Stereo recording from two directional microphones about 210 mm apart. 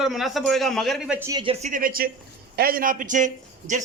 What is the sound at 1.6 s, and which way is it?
A man's voice, 40° right (ahead or behind).